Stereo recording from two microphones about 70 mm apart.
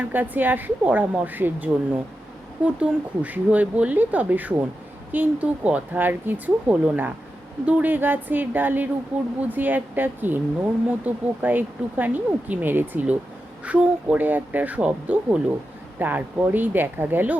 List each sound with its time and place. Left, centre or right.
0.0 s a woman's voice: right